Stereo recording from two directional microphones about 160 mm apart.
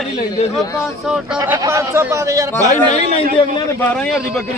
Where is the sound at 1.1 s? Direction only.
5° right (ahead or behind).